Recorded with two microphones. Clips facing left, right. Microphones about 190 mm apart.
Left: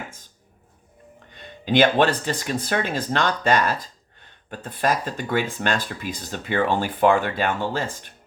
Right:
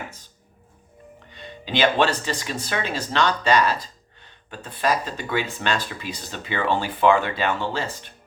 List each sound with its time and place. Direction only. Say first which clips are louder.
1.3 s speech: left 6 dB; 50° left (ahead or behind)